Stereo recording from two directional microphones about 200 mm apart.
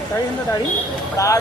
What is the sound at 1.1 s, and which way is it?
Speech, 15° left (ahead or behind).